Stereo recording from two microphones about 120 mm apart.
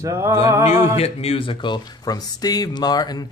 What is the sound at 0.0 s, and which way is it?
Music, 25° right (ahead or behind).